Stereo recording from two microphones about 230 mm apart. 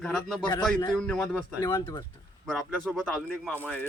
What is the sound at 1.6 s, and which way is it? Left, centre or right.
Speech, centre.